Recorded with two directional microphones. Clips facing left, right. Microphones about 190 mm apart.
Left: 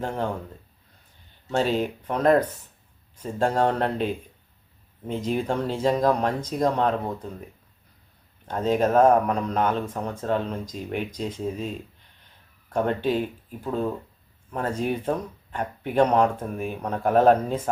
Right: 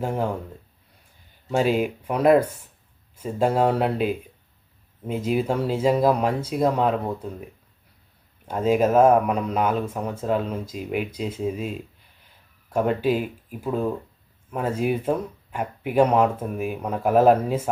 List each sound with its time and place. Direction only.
0.0 s speech: 10° right (ahead or behind)
1.5 s speech: 10° right (ahead or behind)